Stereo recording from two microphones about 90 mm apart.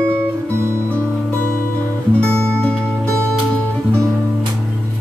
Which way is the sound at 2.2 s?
15° left (ahead or behind).